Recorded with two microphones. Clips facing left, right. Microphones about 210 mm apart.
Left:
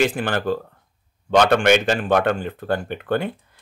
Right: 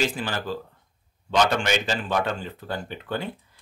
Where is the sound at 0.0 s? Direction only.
60° left (ahead or behind).